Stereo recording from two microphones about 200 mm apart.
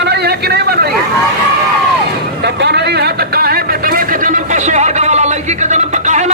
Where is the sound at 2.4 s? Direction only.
60° right (ahead or behind).